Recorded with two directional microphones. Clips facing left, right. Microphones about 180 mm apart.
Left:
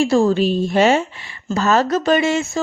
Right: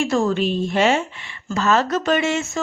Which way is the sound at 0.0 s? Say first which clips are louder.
Left 4 dB; 30° left (ahead or behind).